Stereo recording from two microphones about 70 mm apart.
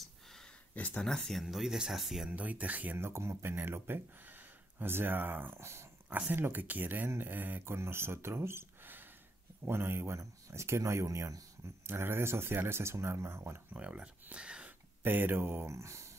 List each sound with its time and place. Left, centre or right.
0.7 s speech: left
1.0 s speech: centre
2.3 s speech: right
3.0 s speech: right
6.0 s speech: right
13.7 s speech: centre
15.0 s speech: right
15.7 s speech: right